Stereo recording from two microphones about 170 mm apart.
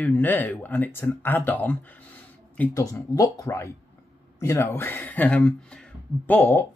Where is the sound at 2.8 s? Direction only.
20° left (ahead or behind).